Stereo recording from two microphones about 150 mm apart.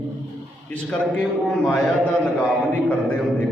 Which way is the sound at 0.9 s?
5° left (ahead or behind).